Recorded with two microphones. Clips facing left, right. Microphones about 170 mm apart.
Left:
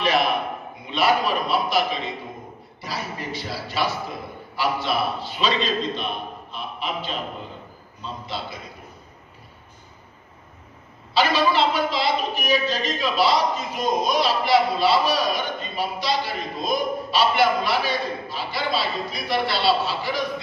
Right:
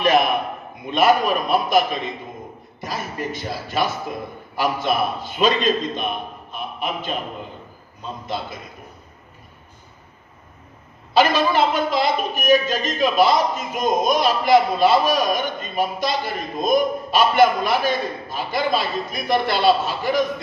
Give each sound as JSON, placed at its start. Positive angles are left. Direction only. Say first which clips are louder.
{"t": 0.8, "sound": "a man's voice", "louder": "right 4 dB", "side_deg": -50}
{"t": 11.1, "sound": "a man's voice", "louder": "right 3 dB", "side_deg": -50}